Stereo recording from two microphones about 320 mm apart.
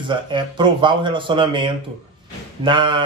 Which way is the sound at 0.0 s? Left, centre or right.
Centre.